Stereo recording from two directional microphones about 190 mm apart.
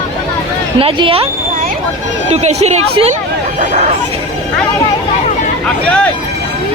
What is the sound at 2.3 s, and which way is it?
Speech, 35° right (ahead or behind).